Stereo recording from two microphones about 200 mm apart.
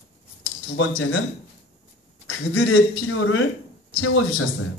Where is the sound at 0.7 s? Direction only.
90° left.